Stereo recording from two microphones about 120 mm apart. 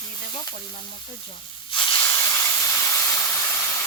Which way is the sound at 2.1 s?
25° left (ahead or behind).